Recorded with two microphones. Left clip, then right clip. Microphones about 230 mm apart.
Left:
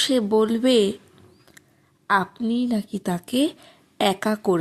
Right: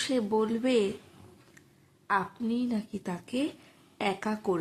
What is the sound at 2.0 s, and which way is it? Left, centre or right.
A woman's voice, left.